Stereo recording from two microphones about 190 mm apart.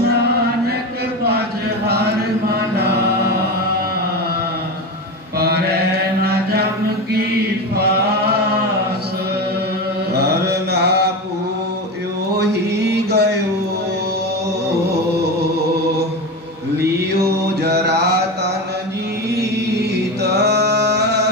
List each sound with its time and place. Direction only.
1.9 s chant: 60° right (ahead or behind)
5.4 s mantra: 55° right (ahead or behind)
7.7 s chant: 60° right (ahead or behind)
10.1 s mantra: 60° right (ahead or behind)
12.4 s chant: 60° right (ahead or behind)
17.2 s mantra: 60° right (ahead or behind)
20.3 s singing: 60° right (ahead or behind)